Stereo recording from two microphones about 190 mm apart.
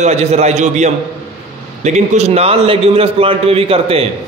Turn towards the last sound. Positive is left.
turn(degrees=-30)  # may be behind; listen again after turning